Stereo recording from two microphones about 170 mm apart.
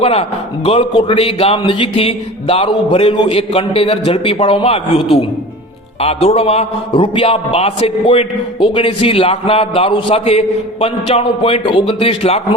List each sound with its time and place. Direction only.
0.0 s a man's voice: 35° left (ahead or behind)